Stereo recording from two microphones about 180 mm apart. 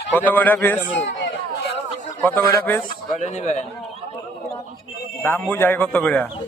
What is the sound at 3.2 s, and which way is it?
Speech, 40° left (ahead or behind).